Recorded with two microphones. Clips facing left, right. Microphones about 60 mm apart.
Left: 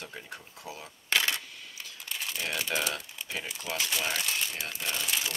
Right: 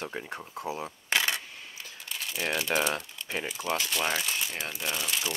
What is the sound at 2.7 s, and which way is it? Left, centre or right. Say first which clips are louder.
Speech: right 4 dB; right.